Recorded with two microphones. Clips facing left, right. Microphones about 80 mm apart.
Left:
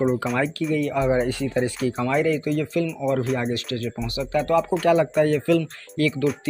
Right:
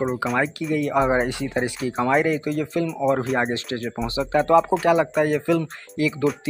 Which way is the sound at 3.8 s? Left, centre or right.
Right.